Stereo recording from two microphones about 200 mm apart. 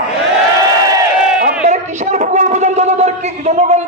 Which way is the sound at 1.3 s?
40° right (ahead or behind).